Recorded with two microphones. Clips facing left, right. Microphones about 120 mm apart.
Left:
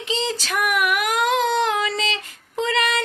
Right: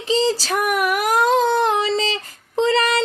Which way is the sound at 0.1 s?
35° right (ahead or behind).